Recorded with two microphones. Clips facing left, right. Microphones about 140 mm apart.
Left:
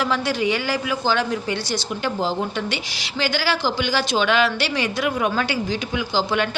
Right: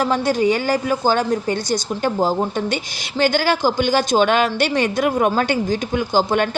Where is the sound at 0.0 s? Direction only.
45° right (ahead or behind).